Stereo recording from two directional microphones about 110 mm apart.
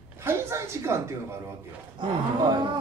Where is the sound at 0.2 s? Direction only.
25° right (ahead or behind).